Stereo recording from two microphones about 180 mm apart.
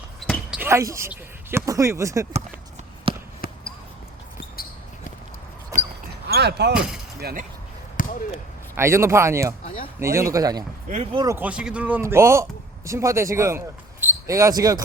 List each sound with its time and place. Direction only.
0.2 s basketball bounce: centre (ahead or behind)
0.6 s speech: 15° right (ahead or behind)
3.1 s basketball bounce: 30° right (ahead or behind)
3.4 s basketball bounce: 55° left (ahead or behind)
6.1 s basketball bounce: 65° right (ahead or behind)
6.7 s speech: 5° right (ahead or behind)
7.2 s speech: 60° right (ahead or behind)
8.3 s a man's voice: 15° right (ahead or behind)
10.8 s speech: 40° right (ahead or behind)
11.1 s speech: 20° right (ahead or behind)
11.3 s a man's voice: 5° right (ahead or behind)